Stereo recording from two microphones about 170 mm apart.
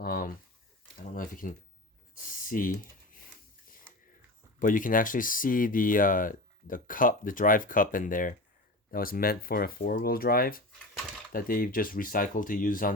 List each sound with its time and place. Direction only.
0.0 s a sound: 60° left (ahead or behind)
0.9 s speech: 50° left (ahead or behind)
2.1 s computer keyboard: 55° left (ahead or behind)
4.6 s speech: 50° left (ahead or behind)